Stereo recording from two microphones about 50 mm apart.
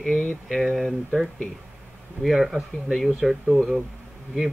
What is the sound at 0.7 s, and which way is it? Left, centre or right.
Speech, centre.